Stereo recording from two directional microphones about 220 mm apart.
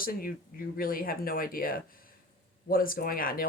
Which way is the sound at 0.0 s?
40° left (ahead or behind).